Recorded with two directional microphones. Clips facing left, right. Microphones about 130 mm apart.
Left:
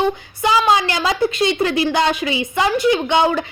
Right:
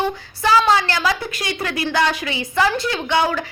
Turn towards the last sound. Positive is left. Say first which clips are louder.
# left 3 dB
turn(degrees=20)  # may be behind; listen again after turning